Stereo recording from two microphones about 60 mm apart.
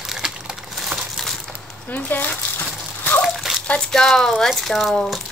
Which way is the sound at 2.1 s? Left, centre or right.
Left.